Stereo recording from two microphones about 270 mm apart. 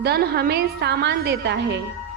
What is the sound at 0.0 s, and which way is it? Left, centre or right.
A woman's voice, right.